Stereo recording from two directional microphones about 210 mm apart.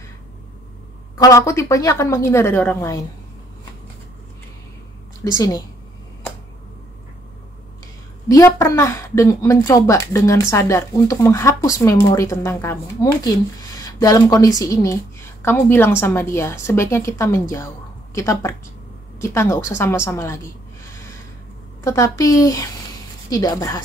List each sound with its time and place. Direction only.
1.1 s a woman's voice: 15° left (ahead or behind)
5.2 s a woman's voice: 15° left (ahead or behind)
8.3 s a woman's voice: 15° left (ahead or behind)
20.9 s a sound: 15° left (ahead or behind)
21.8 s a woman's voice: 15° left (ahead or behind)